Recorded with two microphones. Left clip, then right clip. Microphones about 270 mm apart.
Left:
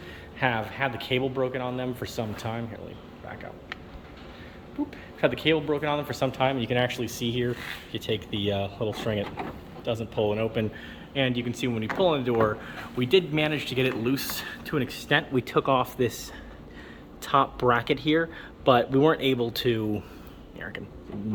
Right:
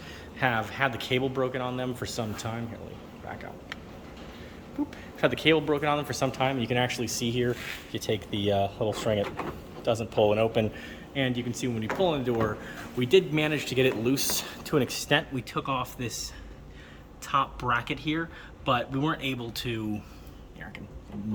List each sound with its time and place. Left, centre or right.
0.3 s speech: centre
5.2 s speech: centre
15.4 s speech: centre